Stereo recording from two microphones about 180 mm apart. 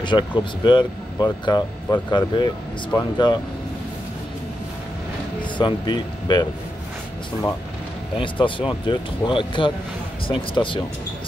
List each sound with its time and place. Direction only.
0.0 s speech: 25° left (ahead or behind)
5.4 s speech: 25° left (ahead or behind)
8.2 s speech: 30° left (ahead or behind)